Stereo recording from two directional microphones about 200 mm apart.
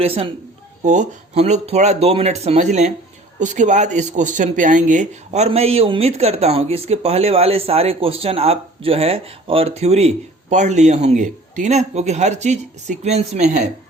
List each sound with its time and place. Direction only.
0.0 s a man's voice: 30° right (ahead or behind)